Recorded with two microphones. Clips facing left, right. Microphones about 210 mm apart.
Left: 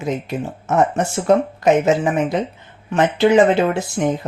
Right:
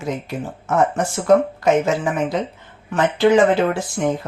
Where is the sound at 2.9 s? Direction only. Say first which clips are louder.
Left 1 dB; 20° left (ahead or behind).